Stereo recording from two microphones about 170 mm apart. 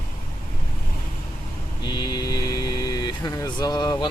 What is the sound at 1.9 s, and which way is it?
Speech, 25° left (ahead or behind).